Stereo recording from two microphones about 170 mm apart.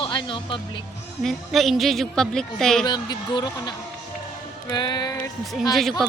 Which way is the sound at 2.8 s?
25° left (ahead or behind).